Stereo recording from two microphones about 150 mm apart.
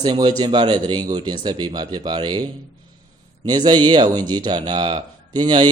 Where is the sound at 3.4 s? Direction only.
30° right (ahead or behind).